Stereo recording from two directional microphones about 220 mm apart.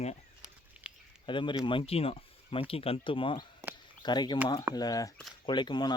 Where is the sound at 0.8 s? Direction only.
5° right (ahead or behind).